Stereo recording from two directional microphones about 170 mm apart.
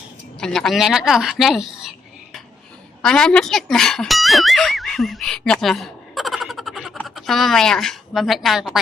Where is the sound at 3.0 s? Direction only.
5° left (ahead or behind).